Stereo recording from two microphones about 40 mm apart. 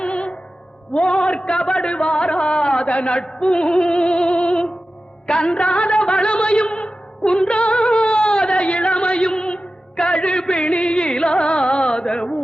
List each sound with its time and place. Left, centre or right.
0.0 s music: left
5.3 s a sound: left
10.0 s music: left